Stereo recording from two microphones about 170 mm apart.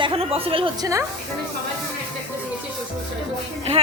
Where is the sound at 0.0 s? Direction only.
35° right (ahead or behind).